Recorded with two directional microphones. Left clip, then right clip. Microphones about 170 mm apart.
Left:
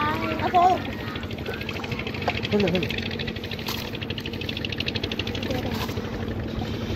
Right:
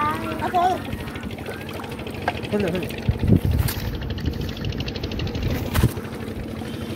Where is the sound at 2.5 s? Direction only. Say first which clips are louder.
Left 2 dB; 40° right (ahead or behind).